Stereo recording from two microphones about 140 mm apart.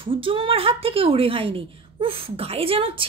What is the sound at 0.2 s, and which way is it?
Speech, 40° right (ahead or behind).